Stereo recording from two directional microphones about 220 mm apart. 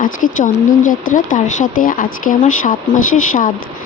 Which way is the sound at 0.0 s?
35° left (ahead or behind).